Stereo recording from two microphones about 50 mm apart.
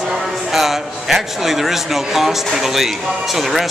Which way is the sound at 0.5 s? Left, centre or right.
Centre.